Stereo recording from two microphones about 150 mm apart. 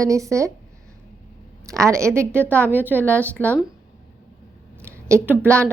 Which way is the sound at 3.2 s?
10° left (ahead or behind).